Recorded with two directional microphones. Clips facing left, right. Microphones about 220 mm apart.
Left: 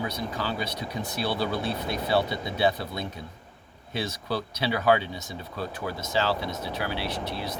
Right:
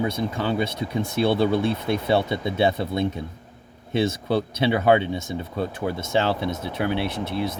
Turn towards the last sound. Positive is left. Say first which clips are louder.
# right 6 dB
turn(degrees=-20)  # may be behind; listen again after turning